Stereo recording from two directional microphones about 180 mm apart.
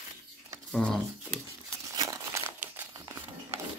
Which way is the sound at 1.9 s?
15° right (ahead or behind).